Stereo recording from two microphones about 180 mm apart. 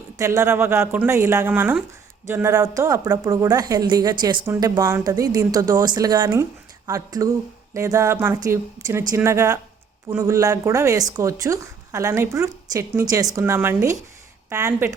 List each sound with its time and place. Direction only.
0.2 s a woman's voice: 15° right (ahead or behind)